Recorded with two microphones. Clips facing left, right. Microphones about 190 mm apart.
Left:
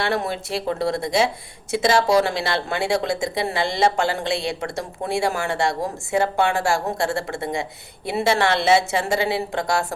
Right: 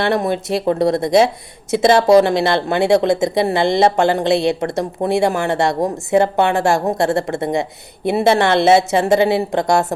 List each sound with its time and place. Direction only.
0.1 s speech: 20° right (ahead or behind)